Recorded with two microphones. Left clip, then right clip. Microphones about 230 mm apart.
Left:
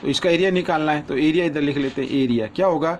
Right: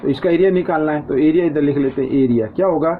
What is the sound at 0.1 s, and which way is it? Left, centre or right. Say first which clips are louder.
A man's voice: right 3 dB; left.